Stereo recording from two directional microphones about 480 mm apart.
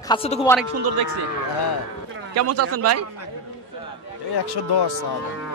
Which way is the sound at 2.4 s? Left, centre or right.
Right.